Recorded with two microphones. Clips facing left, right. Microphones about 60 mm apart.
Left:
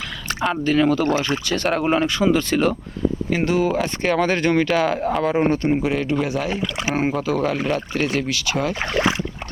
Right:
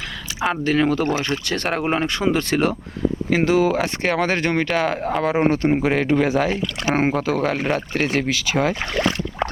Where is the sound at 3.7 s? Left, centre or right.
Right.